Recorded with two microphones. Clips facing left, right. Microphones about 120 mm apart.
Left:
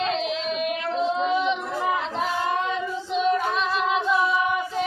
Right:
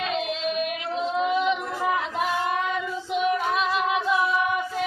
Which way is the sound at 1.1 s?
25° left (ahead or behind).